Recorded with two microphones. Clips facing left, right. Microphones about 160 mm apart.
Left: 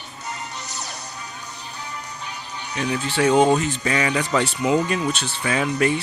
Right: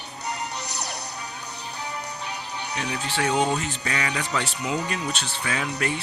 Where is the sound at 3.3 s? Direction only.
45° left (ahead or behind).